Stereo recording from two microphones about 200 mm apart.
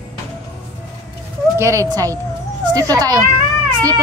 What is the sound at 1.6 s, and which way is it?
A child's voice, 15° right (ahead or behind).